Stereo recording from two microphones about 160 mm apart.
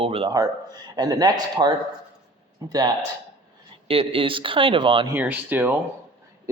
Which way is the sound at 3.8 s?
35° right (ahead or behind).